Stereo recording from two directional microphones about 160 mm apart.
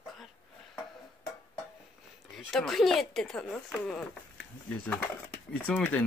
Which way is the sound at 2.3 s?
Centre (ahead or behind).